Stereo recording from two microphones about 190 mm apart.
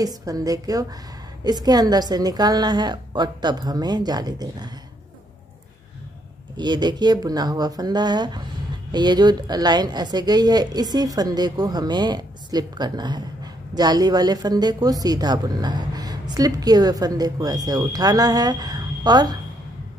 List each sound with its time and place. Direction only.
0.0 s a woman's voice: 20° right (ahead or behind)
6.5 s a woman's voice: 20° right (ahead or behind)